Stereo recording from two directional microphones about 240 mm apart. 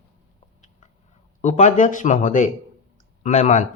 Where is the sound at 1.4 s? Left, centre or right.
Left.